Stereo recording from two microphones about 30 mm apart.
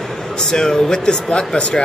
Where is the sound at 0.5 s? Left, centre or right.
Left.